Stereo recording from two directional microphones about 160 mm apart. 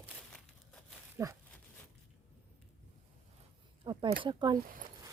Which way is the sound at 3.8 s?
25° right (ahead or behind).